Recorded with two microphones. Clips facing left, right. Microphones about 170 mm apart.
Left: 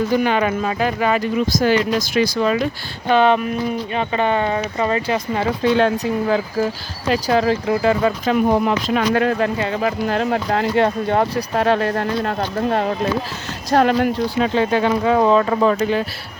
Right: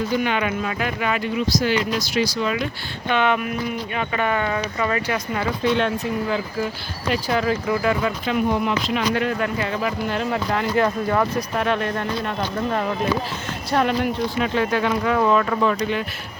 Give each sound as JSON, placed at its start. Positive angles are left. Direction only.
{"t": 0.2, "sound": "speech", "side_deg": 40}